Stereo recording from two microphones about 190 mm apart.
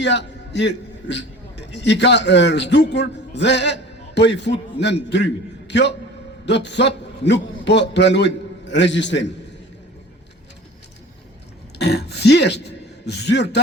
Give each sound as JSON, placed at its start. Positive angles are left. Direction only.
{"t": 0.0, "sound": "a man's voice", "side_deg": 65}
{"t": 11.8, "sound": "speech", "side_deg": 60}